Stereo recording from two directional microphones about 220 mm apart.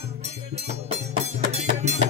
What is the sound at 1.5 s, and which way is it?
Music, 30° right (ahead or behind).